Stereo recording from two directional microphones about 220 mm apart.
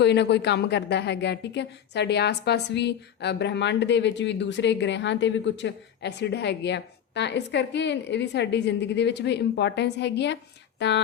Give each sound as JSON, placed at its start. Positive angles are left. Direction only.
{"t": 0.0, "sound": "speech", "side_deg": 50}